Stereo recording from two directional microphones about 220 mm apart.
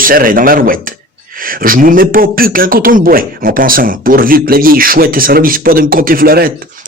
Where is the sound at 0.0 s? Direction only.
40° right (ahead or behind).